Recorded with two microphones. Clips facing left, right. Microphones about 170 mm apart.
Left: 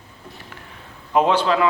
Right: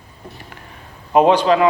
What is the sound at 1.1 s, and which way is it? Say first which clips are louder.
Speech: right 5 dB; 15° right (ahead or behind).